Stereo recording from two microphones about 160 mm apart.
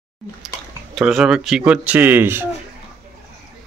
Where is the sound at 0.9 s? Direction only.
5° right (ahead or behind).